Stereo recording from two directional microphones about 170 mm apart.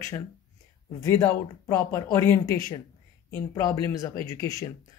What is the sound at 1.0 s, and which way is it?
Speech, 15° left (ahead or behind).